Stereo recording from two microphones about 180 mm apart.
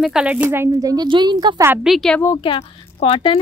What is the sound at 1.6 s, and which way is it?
Speech, 10° right (ahead or behind).